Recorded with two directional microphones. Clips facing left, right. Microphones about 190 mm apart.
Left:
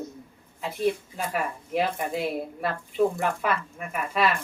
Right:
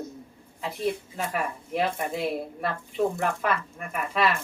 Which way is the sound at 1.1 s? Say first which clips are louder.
Even; centre (ahead or behind).